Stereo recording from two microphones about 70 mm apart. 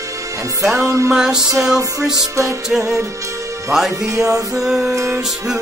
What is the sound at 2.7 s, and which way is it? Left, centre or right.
Music, centre.